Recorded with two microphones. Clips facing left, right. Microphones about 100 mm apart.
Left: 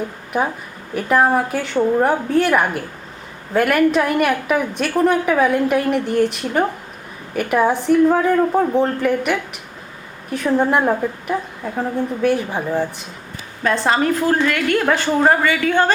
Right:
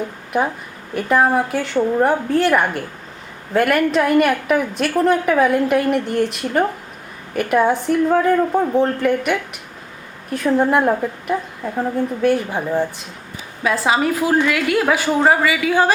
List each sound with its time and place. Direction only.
0.3 s a woman's voice: centre (ahead or behind)